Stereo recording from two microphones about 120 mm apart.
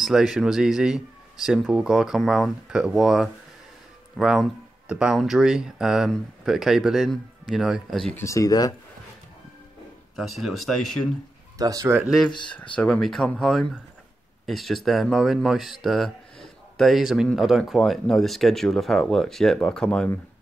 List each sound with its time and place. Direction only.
0.0 s a man's voice: centre (ahead or behind)
8.1 s speech: 25° left (ahead or behind)
10.1 s speech: centre (ahead or behind)
11.5 s speech: 30° right (ahead or behind)
12.3 s speech: 40° left (ahead or behind)
12.7 s speech: 10° left (ahead or behind)